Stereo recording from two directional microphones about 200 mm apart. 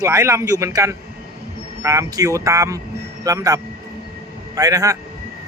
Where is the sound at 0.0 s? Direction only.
15° right (ahead or behind).